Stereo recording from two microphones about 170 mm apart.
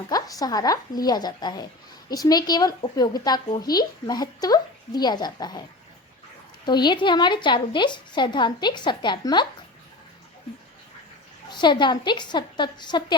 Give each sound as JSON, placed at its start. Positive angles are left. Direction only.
{"t": 0.1, "sound": "a woman's voice", "side_deg": 20}
{"t": 6.7, "sound": "a woman's voice", "side_deg": 25}
{"t": 11.5, "sound": "a woman's voice", "side_deg": 25}